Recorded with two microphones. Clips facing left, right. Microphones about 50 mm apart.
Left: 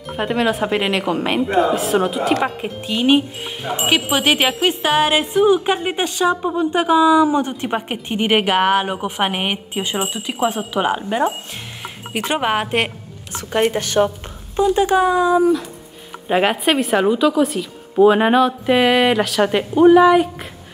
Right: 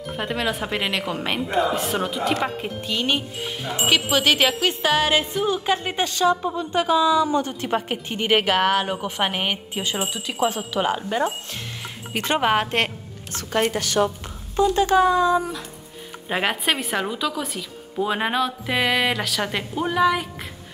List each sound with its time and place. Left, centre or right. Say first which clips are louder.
0.1 s a woman's voice: left 7 dB; centre
3.6 s a woman's voice: left 3 dB; left
13.7 s speech: left 4 dB; left
14.6 s a woman's voice: left 2 dB; centre